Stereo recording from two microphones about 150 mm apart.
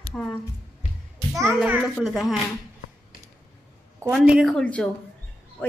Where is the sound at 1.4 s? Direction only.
10° right (ahead or behind).